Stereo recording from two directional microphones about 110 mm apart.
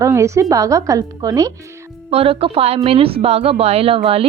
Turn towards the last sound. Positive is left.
turn(degrees=-60)  # may be behind; listen again after turning